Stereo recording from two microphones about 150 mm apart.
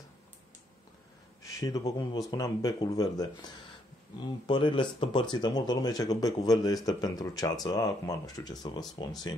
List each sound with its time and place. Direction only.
1.4 s speech: 25° left (ahead or behind)
4.5 s speech: 35° left (ahead or behind)